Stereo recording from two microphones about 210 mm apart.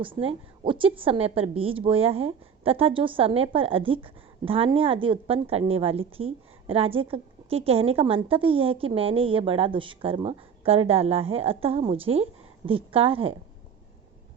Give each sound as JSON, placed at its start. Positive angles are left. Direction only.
{"t": 0.0, "sound": "a woman's voice", "side_deg": -25}